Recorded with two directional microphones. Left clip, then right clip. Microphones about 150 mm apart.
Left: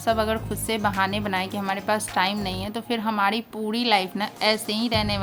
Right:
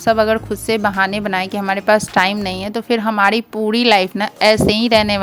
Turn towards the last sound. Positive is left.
turn(degrees=-60)  # may be behind; listen again after turning